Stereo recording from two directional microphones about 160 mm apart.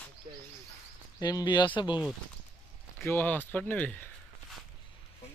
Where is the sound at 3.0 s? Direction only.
15° left (ahead or behind).